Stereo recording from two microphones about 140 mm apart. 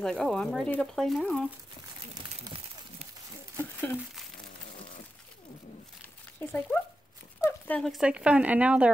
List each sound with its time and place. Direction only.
0.0 s speech: 5° left (ahead or behind)
6.4 s speech: 15° left (ahead or behind)
7.4 s a sound: 10° left (ahead or behind)
7.8 s speech: 5° right (ahead or behind)